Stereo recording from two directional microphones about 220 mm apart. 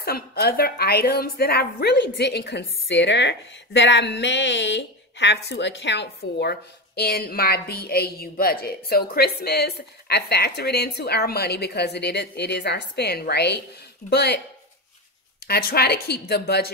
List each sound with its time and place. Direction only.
0.0 s a woman's voice: 45° left (ahead or behind)
15.4 s a woman's voice: 45° left (ahead or behind)